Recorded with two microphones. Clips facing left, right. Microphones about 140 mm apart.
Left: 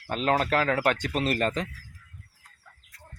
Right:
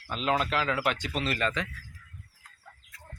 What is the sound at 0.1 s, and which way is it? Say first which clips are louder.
Speech: left 3 dB; 45° left (ahead or behind).